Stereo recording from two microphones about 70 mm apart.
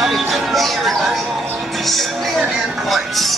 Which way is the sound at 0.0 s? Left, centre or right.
Centre.